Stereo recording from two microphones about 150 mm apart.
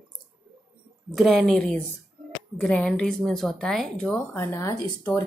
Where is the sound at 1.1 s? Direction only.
Centre (ahead or behind).